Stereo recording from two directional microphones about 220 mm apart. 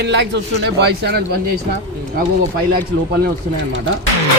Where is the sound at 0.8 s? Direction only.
50° right (ahead or behind).